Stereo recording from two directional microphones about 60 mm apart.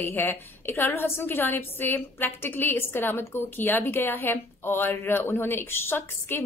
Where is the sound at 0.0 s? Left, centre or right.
Left.